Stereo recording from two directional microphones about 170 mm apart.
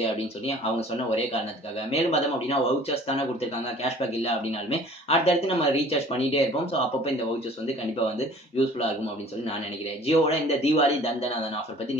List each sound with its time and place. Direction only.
0.0 s speech: 35° left (ahead or behind)
10.0 s speech: 35° left (ahead or behind)